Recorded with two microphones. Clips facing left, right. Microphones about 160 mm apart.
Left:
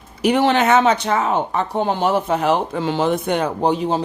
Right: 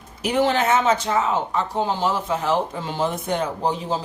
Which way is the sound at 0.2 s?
70° left (ahead or behind).